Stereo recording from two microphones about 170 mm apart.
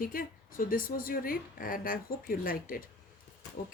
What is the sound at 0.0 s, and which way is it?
A woman's voice, 55° left (ahead or behind).